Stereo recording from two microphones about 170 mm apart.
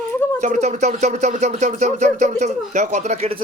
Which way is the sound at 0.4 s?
45° right (ahead or behind).